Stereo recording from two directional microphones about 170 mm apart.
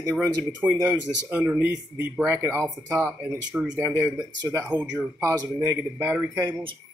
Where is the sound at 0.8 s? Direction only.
10° right (ahead or behind).